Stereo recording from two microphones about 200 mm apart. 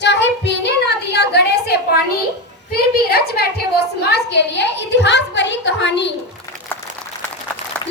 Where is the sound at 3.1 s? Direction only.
50° left (ahead or behind).